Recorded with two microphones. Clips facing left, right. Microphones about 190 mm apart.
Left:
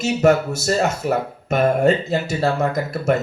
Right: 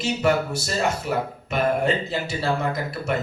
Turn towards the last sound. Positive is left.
turn(degrees=45)  # may be behind; listen again after turning